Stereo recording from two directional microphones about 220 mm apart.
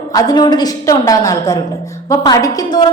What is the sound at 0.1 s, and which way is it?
A woman's voice, 15° left (ahead or behind).